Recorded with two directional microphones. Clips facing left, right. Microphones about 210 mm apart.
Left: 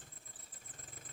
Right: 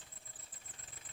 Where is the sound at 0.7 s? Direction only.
45° left (ahead or behind).